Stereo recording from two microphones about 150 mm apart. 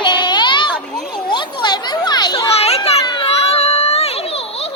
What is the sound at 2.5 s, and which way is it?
Children playing, 40° left (ahead or behind).